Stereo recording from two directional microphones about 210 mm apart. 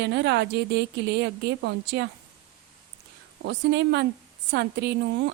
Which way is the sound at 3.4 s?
55° right (ahead or behind).